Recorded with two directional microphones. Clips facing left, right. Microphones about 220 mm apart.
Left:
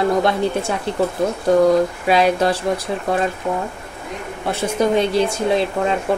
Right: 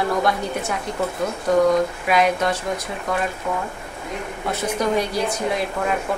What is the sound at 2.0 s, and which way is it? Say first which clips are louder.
Speech: left 3 dB; 30° left (ahead or behind).